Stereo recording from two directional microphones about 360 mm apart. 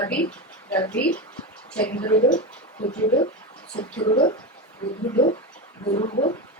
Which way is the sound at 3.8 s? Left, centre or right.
Centre.